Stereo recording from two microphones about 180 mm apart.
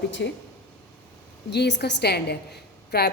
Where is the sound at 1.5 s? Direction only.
65° left (ahead or behind).